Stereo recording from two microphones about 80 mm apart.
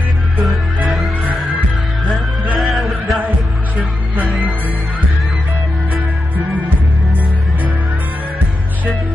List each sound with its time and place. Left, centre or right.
0.4 s music: centre